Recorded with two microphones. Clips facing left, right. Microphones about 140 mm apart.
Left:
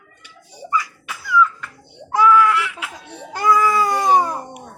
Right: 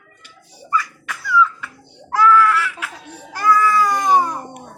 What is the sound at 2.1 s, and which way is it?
Baby cry, 15° left (ahead or behind).